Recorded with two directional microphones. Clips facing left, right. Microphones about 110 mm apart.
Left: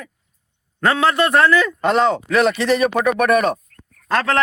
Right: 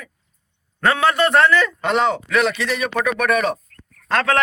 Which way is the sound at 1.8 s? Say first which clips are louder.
Left 3 dB; 35° left (ahead or behind).